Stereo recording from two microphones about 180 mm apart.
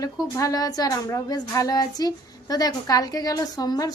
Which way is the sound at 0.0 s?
20° left (ahead or behind).